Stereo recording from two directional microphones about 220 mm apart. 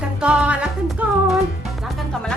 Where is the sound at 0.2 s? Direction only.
5° right (ahead or behind).